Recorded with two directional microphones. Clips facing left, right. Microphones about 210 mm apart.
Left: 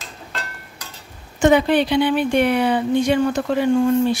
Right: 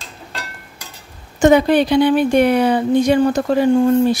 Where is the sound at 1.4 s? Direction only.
40° right (ahead or behind).